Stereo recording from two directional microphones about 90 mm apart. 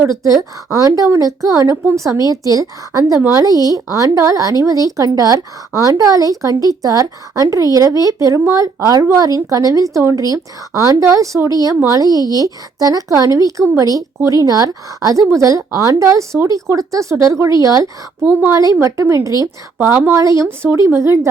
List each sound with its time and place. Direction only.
0.7 s speech: 40° right (ahead or behind)
1.7 s a woman's voice: 25° right (ahead or behind)
2.0 s speech: 40° right (ahead or behind)
18.2 s a woman's voice: 20° right (ahead or behind)
18.5 s speech: 35° right (ahead or behind)
19.8 s a woman's voice: 25° right (ahead or behind)
20.1 s speech: 35° right (ahead or behind)